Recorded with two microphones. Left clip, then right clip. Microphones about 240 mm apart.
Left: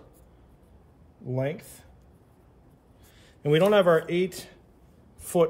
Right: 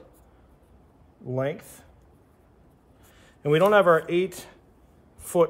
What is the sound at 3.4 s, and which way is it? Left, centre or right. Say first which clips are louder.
A woman's voice: right 2 dB; centre.